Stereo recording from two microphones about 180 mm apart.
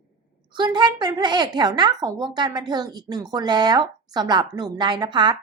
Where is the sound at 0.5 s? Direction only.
25° right (ahead or behind).